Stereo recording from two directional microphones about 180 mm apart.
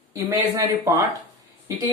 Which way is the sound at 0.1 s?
15° right (ahead or behind).